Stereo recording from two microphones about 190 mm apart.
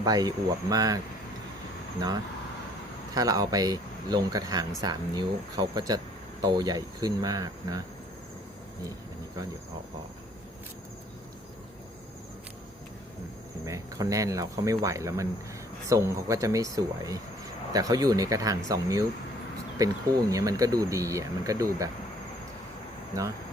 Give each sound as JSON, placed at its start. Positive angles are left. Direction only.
{"t": 0.0, "sound": "speech", "side_deg": -20}
{"t": 3.2, "sound": "speech", "side_deg": -20}
{"t": 13.7, "sound": "speech", "side_deg": -15}
{"t": 20.3, "sound": "speech", "side_deg": -20}